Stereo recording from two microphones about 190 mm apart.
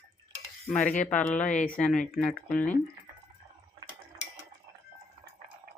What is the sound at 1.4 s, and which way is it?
Speech, 40° left (ahead or behind).